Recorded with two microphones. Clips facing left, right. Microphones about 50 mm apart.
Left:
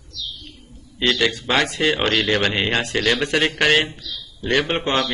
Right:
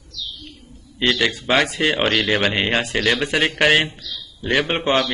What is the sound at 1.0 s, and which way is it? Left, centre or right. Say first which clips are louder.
A man's voice: even; centre.